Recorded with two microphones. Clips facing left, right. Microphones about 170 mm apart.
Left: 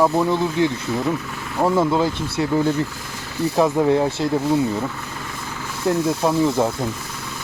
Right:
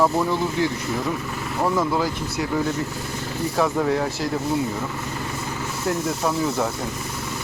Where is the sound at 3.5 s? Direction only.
20° left (ahead or behind).